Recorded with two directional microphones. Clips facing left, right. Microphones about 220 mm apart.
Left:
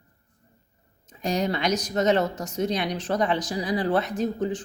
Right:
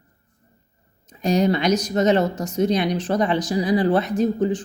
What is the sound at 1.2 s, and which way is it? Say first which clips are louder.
Speech: right 6 dB; 15° right (ahead or behind).